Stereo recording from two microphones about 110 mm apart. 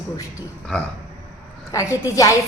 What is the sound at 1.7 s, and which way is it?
Speech, 30° left (ahead or behind).